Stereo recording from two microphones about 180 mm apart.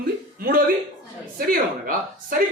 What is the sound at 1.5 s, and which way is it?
Speech, 50° right (ahead or behind).